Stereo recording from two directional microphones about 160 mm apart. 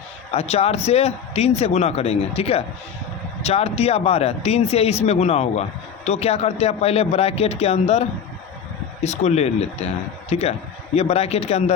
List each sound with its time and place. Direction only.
0.3 s a man's voice: 40° left (ahead or behind)
9.0 s a man's voice: 45° left (ahead or behind)